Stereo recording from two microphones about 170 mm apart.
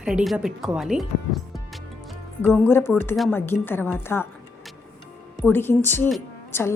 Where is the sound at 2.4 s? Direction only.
10° left (ahead or behind).